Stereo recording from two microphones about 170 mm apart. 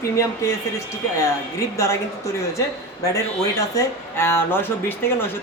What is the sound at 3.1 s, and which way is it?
Speech, 20° left (ahead or behind).